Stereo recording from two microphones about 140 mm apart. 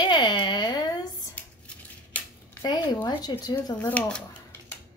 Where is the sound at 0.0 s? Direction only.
30° left (ahead or behind).